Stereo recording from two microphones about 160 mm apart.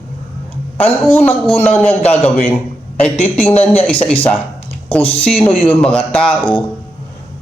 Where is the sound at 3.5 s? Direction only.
40° left (ahead or behind).